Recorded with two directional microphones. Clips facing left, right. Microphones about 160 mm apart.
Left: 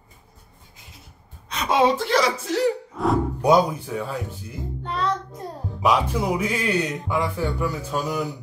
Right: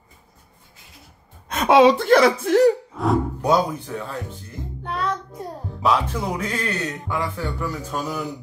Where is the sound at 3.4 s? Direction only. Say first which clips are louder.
Left 2 dB; 15° left (ahead or behind).